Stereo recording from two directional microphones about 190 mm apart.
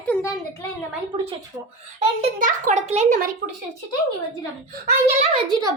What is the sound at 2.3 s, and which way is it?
Speech, 45° right (ahead or behind).